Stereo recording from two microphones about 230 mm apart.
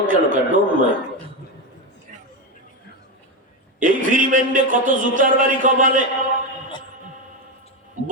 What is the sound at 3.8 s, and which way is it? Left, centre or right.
A man's voice, right.